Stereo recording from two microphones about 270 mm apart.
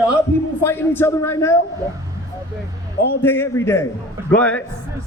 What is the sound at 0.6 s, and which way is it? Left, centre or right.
Speech, centre.